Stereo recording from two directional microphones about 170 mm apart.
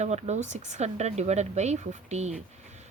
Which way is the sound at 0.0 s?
40° right (ahead or behind).